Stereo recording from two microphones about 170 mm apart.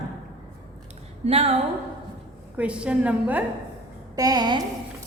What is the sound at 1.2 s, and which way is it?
Speech, 35° right (ahead or behind).